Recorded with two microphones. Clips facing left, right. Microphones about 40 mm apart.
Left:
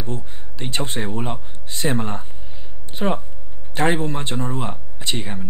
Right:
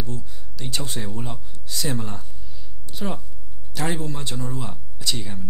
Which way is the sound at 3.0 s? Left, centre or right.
Left.